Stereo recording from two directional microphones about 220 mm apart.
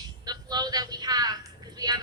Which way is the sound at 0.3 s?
20° right (ahead or behind).